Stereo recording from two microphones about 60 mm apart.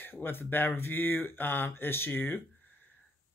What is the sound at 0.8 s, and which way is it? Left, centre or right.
Speech, left.